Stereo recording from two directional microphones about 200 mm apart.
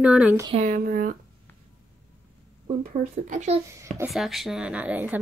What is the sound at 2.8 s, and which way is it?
Speech, 40° right (ahead or behind).